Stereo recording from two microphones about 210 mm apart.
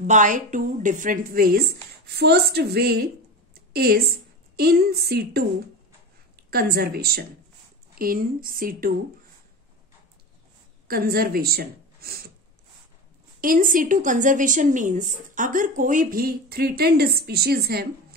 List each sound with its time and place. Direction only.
0.0 s a woman's voice: 35° right (ahead or behind)
3.5 s a sound: 50° right (ahead or behind)
4.6 s a woman's voice: 50° right (ahead or behind)
10.9 s speech: 45° right (ahead or behind)
13.4 s a woman's voice: 40° right (ahead or behind)